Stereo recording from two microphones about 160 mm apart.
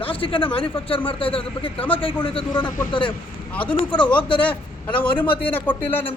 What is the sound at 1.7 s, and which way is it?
Speech, 10° left (ahead or behind).